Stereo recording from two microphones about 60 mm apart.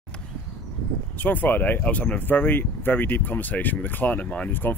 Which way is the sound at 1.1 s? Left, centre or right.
Left.